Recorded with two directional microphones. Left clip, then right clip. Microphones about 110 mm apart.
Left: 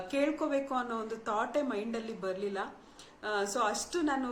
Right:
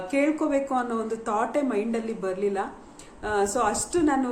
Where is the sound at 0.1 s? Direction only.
10° left (ahead or behind).